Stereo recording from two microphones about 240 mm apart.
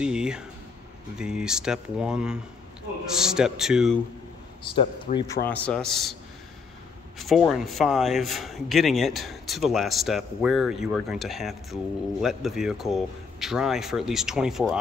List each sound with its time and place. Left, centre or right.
0.0 s a sound: centre
1.1 s speech: centre
4.7 s speech: centre
5.5 s speech: centre
7.2 s speech: centre